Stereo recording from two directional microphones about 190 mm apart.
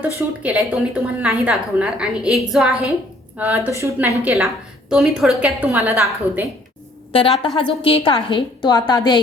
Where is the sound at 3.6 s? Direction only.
15° right (ahead or behind).